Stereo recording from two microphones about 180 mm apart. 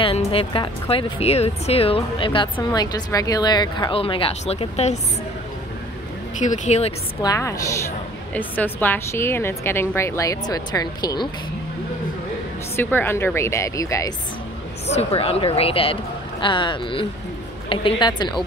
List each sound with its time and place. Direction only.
0.0 s a woman's voice: 30° left (ahead or behind)
6.4 s speech: 45° left (ahead or behind)
7.2 s a woman's voice: 20° left (ahead or behind)
12.7 s a woman's voice: 10° left (ahead or behind)
14.9 s a woman's voice: 35° left (ahead or behind)